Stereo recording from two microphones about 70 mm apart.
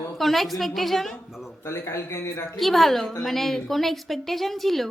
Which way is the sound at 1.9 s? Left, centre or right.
Left.